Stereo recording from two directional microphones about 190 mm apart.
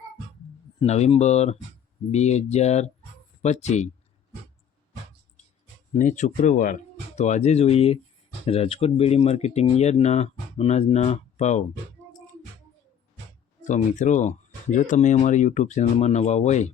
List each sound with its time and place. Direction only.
0.8 s speech: 35° left (ahead or behind)
5.9 s speech: 40° left (ahead or behind)
13.7 s speech: 40° left (ahead or behind)